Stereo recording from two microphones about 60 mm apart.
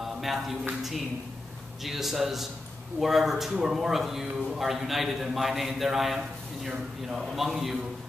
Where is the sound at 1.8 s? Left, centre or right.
Centre.